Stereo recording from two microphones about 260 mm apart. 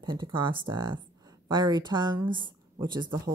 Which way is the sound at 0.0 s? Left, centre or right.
Centre.